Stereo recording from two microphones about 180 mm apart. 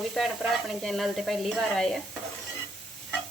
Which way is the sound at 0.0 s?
Centre (ahead or behind).